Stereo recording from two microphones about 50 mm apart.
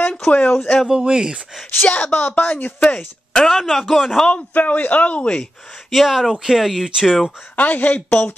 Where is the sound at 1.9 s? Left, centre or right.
Left.